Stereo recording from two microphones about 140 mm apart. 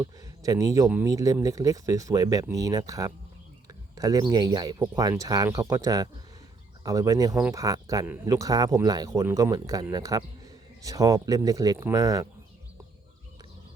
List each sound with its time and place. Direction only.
0.0 s speech: 25° right (ahead or behind)
8.0 s speech: 15° right (ahead or behind)